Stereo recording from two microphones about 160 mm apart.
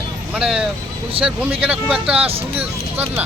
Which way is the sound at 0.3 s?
5° right (ahead or behind).